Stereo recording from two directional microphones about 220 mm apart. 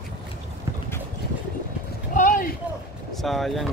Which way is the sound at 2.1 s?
35° left (ahead or behind).